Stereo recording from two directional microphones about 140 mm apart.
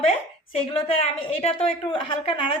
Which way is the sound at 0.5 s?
45° left (ahead or behind).